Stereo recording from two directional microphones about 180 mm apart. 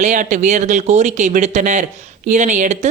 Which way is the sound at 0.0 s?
45° right (ahead or behind).